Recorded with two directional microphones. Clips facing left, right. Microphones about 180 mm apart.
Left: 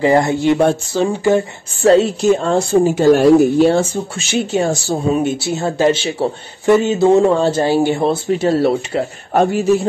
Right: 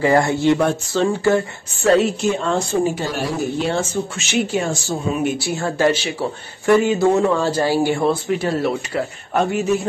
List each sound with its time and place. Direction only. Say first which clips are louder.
0.0 s speech: left 2 dB; 20° left (ahead or behind)
1.8 s speech: left 4 dB; 30° left (ahead or behind)
3.1 s speech: left 14 dB; 50° left (ahead or behind)